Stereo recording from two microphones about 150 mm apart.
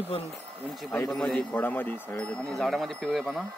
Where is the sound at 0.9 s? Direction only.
15° left (ahead or behind).